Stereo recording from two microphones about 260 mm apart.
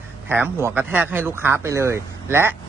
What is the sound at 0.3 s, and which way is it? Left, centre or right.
Speech, centre.